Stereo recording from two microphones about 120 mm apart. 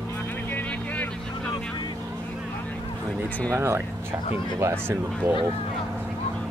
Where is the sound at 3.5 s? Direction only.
20° right (ahead or behind).